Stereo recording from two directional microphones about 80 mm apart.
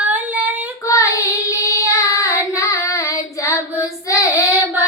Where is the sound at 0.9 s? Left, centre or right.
Left.